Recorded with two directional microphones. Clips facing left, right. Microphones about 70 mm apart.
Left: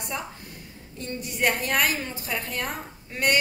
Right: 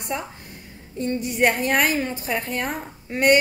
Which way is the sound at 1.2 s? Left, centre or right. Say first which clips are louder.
Right 4 dB; right.